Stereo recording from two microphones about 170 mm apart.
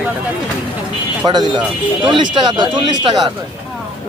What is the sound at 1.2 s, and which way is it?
Speech, 25° right (ahead or behind).